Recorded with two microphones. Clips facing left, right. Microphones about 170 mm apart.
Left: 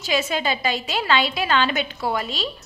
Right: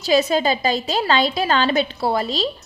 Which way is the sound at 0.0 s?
35° right (ahead or behind).